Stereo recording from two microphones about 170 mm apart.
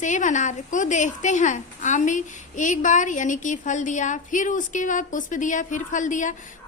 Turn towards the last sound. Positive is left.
turn(degrees=50)  # may be behind; listen again after turning